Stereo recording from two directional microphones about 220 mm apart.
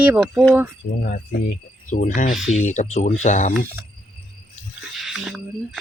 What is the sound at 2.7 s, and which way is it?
Speech, 30° left (ahead or behind).